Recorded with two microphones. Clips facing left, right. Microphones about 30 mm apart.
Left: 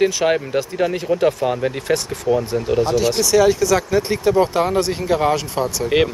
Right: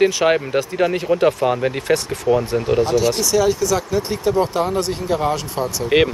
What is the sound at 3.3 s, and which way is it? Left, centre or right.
Speech, centre.